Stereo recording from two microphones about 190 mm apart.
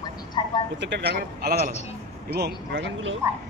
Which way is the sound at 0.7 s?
65° right (ahead or behind).